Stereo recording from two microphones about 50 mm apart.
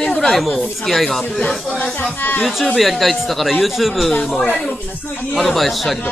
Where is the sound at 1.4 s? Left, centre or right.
Left.